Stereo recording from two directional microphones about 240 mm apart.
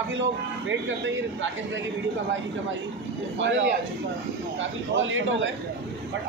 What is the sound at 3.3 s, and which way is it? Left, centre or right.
Speech, right.